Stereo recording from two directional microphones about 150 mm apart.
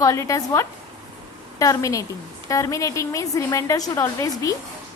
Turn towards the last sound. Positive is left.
turn(degrees=20)  # may be behind; listen again after turning